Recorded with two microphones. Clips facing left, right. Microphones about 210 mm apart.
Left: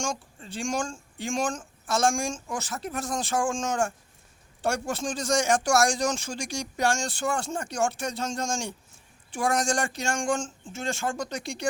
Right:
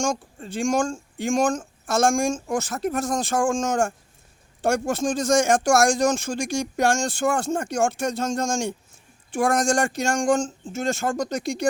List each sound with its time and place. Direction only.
0.0 s speech: 45° right (ahead or behind)